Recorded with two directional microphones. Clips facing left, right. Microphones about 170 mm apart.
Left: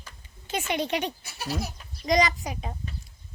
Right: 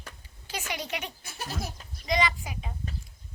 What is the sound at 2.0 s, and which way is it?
Speech, 40° left (ahead or behind).